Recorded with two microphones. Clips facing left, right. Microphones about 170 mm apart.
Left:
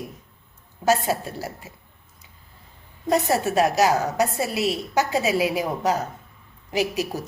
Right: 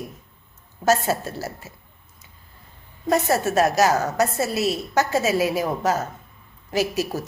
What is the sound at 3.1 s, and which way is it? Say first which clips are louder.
A woman's voice: right 1 dB; 15° left (ahead or behind).